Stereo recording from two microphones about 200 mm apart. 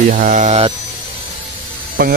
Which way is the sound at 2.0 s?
45° right (ahead or behind).